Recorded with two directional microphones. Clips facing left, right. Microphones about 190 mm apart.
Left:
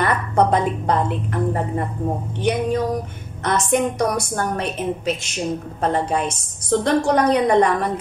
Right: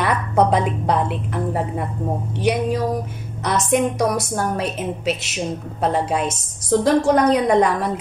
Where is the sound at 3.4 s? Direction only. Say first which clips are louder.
Right 1 dB; centre (ahead or behind).